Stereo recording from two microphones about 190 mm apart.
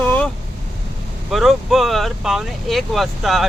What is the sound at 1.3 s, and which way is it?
Speech, centre (ahead or behind).